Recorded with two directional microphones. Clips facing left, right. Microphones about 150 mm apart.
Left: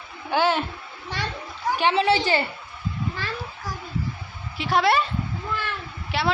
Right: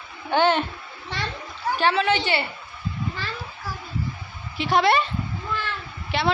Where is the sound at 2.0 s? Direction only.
35° left (ahead or behind).